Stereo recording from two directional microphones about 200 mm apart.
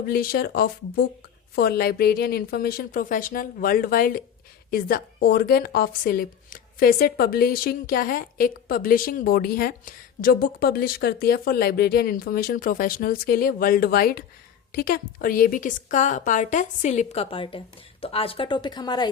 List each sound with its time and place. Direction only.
0.0 s a woman's voice: 45° left (ahead or behind); by 19.0 s 20° left (ahead or behind)